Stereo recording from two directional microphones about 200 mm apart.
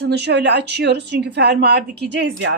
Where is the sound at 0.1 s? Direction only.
60° right (ahead or behind).